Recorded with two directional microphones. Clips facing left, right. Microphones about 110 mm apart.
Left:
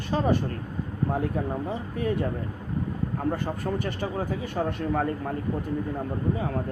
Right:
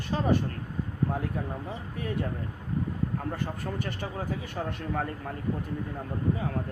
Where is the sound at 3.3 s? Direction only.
30° left (ahead or behind).